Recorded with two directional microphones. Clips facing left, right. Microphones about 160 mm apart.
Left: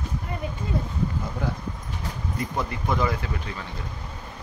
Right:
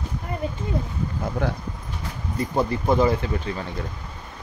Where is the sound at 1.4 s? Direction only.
65° right (ahead or behind).